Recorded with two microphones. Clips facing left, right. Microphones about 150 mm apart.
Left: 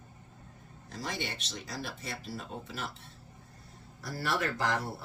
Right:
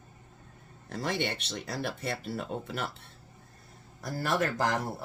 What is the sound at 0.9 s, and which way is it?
Speech, 60° right (ahead or behind).